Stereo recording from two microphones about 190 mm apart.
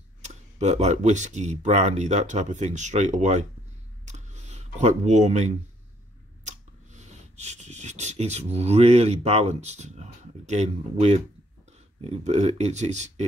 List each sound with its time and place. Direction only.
0.2 s speech: 40° right (ahead or behind)
4.0 s a sound: 35° right (ahead or behind)
6.4 s speech: 40° right (ahead or behind)